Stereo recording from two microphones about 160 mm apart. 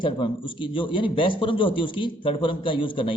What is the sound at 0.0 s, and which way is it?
A man's voice, 30° left (ahead or behind).